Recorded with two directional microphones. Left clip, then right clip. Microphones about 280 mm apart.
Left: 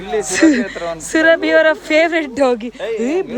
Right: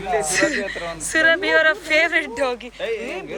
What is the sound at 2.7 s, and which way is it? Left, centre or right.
Speech, left.